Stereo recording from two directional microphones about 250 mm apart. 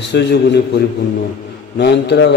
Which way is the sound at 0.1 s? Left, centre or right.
Left.